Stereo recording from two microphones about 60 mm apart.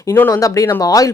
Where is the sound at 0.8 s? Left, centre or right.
Left.